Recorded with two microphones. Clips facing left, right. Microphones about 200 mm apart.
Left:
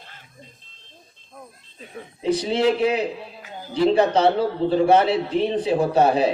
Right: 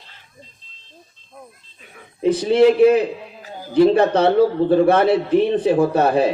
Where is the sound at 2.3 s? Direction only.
55° right (ahead or behind).